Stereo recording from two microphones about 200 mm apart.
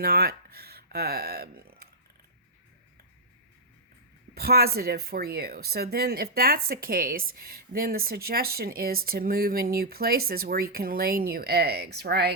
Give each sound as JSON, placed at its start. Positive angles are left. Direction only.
{"t": 0.0, "sound": "speech", "side_deg": -50}
{"t": 4.4, "sound": "speech", "side_deg": -50}